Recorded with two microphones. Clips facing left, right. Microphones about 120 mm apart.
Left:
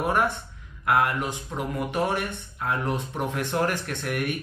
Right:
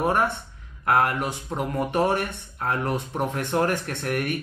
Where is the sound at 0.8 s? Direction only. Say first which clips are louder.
Right 1 dB; 35° right (ahead or behind).